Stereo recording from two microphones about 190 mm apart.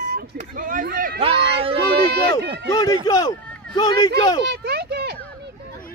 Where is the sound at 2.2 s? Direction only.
65° right (ahead or behind).